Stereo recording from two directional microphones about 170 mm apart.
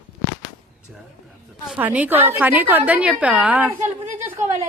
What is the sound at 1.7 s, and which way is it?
A woman's voice, 10° right (ahead or behind).